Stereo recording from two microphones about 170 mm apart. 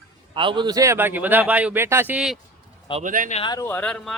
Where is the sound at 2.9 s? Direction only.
50° right (ahead or behind).